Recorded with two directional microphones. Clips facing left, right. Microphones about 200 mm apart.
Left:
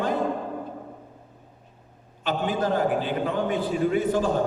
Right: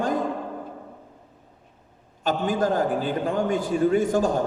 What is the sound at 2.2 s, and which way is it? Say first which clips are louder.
A man's voice: right 2 dB; 45° right (ahead or behind).